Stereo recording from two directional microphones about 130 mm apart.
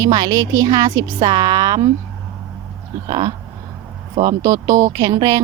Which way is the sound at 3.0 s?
30° right (ahead or behind).